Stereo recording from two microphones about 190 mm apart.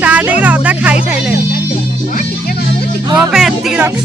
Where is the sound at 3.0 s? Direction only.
20° right (ahead or behind).